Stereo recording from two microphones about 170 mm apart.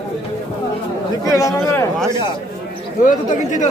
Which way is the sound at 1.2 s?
20° left (ahead or behind).